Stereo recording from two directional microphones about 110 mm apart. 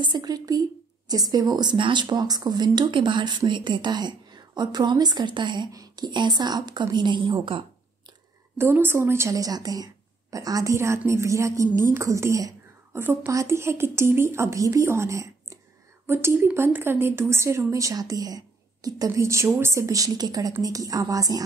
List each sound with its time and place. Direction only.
0.0 s a woman's voice: 40° right (ahead or behind)
8.5 s a woman's voice: 20° right (ahead or behind)